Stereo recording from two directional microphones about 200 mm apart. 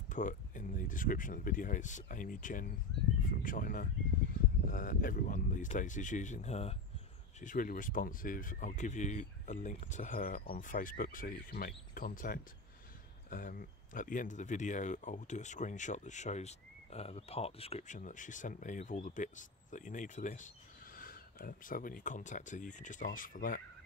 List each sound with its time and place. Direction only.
0.1 s speech: 40° left (ahead or behind)